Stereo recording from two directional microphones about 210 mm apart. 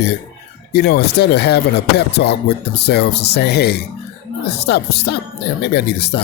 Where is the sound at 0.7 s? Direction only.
50° left (ahead or behind).